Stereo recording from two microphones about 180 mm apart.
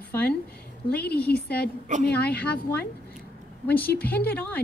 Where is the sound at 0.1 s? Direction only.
10° left (ahead or behind).